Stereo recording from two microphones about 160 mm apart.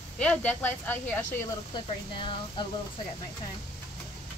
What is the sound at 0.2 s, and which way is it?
Speech, 10° left (ahead or behind).